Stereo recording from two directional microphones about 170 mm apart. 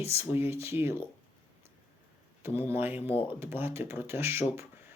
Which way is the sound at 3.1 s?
35° left (ahead or behind).